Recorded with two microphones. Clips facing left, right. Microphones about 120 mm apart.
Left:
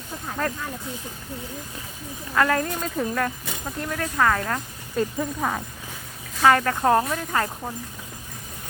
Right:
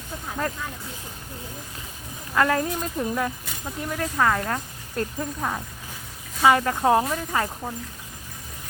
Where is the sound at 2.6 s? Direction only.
5° right (ahead or behind).